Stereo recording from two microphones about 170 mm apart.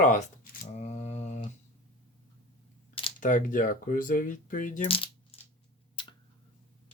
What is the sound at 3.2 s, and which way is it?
Speech, 50° left (ahead or behind).